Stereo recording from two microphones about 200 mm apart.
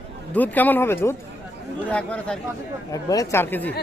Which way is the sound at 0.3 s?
10° left (ahead or behind).